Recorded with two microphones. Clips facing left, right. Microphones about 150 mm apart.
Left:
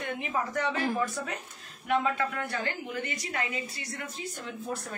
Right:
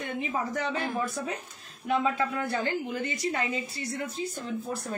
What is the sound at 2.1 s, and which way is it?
A woman's voice, 35° right (ahead or behind).